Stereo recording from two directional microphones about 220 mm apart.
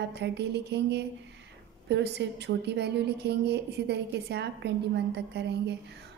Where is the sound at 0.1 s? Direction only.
50° right (ahead or behind).